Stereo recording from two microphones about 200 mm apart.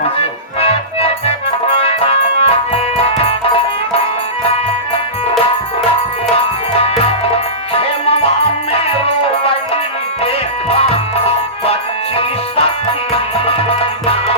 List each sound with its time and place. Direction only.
0.6 s music: 30° left (ahead or behind)
6.3 s music: 30° left (ahead or behind)
11.6 s music: 30° left (ahead or behind)